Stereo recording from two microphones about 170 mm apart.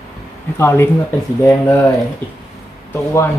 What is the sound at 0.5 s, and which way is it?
Speech, 15° left (ahead or behind).